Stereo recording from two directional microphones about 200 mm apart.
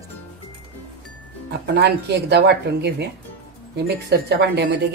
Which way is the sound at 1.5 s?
55° right (ahead or behind).